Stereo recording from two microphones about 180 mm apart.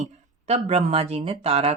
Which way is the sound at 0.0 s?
40° right (ahead or behind).